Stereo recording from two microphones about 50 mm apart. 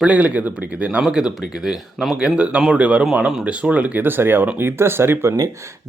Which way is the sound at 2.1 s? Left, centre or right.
Right.